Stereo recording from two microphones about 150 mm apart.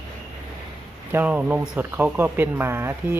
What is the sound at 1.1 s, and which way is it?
Speech, 10° right (ahead or behind).